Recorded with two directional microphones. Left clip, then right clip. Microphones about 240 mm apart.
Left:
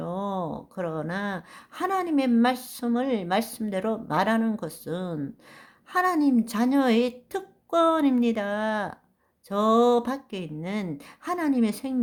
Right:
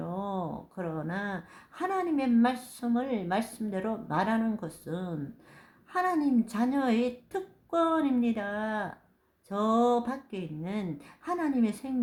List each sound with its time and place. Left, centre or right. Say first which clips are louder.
0.0 s a woman's voice: left 4 dB; left